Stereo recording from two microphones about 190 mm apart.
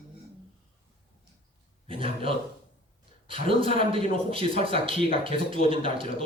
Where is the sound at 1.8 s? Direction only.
30° right (ahead or behind).